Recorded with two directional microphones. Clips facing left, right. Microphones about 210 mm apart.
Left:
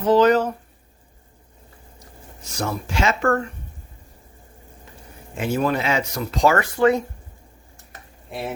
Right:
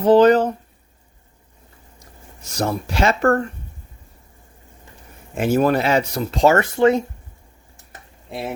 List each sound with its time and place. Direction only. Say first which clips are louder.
0.0 s speech: right 4 dB; 30° right (ahead or behind)
2.6 s speech: right 4 dB; 35° right (ahead or behind)
5.4 s speech: right 5 dB; 45° right (ahead or behind); by 7.0 s 25° right (ahead or behind)